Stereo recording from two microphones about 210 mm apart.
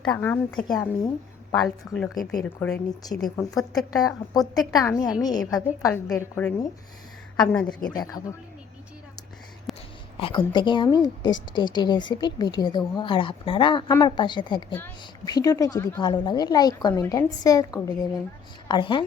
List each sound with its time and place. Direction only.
0.0 s a woman's voice: 5° left (ahead or behind)
3.2 s a woman's voice: centre (ahead or behind)
3.9 s a woman's voice: 15° left (ahead or behind)
4.5 s a woman's voice: centre (ahead or behind)
4.8 s a woman's voice: 15° left (ahead or behind)
9.7 s a sound: centre (ahead or behind)
10.2 s a woman's voice: 25° left (ahead or behind)